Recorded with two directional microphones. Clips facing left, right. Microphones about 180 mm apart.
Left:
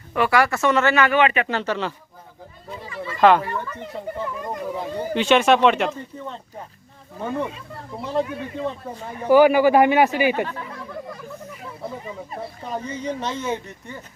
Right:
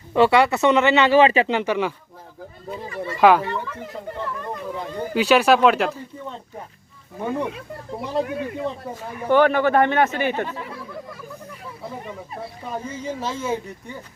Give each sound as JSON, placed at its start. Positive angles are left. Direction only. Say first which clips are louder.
{"t": 0.1, "sound": "speech", "louder": "right 4 dB", "side_deg": -25}
{"t": 1.5, "sound": "speech", "louder": "right 3 dB", "side_deg": -15}
{"t": 2.8, "sound": "speech", "louder": "right 2 dB", "side_deg": -50}
{"t": 3.2, "sound": "speech", "louder": "even", "side_deg": -10}
{"t": 4.2, "sound": "speech", "louder": "left 1 dB", "side_deg": 10}
{"t": 5.1, "sound": "speech", "louder": "right 1 dB", "side_deg": 0}
{"t": 8.0, "sound": "speech", "louder": "even", "side_deg": -10}
{"t": 9.3, "sound": "speech", "louder": "left 3 dB", "side_deg": 10}
{"t": 12.6, "sound": "speech", "louder": "left 1 dB", "side_deg": -5}